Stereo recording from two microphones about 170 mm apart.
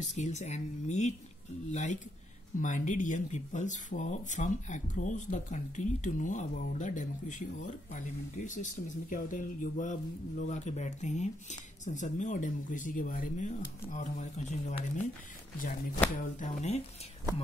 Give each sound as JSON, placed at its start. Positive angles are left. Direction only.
{"t": 0.0, "sound": "speech", "side_deg": 45}
{"t": 16.2, "sound": "speech", "side_deg": 45}